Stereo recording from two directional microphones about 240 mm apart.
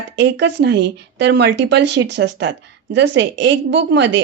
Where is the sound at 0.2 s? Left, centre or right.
Right.